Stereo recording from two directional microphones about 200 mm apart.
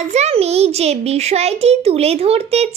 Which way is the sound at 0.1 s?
30° right (ahead or behind).